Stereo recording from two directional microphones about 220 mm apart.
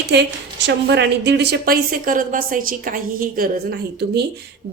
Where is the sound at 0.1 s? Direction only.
50° right (ahead or behind).